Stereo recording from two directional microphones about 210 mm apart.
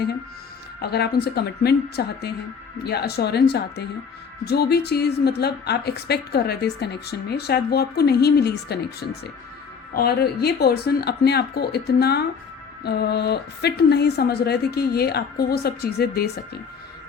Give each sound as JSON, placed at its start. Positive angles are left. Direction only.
{"t": 0.8, "sound": "a woman's voice", "side_deg": 50}